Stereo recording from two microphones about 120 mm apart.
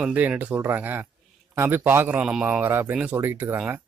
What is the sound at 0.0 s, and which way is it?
Speech, 15° right (ahead or behind).